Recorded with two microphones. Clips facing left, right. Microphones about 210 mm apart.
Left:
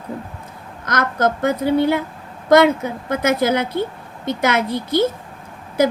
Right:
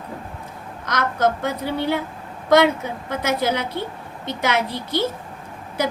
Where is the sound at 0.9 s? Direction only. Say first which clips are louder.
Left 2 dB; 45° left (ahead or behind).